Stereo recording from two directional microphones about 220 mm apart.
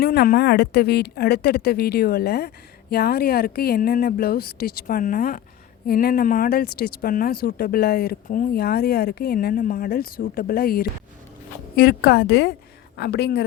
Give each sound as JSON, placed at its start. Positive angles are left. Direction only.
{"t": 0.0, "sound": "speech", "side_deg": 45}